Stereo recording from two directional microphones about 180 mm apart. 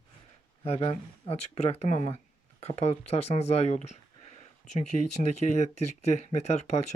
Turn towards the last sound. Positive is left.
turn(degrees=40)  # may be behind; listen again after turning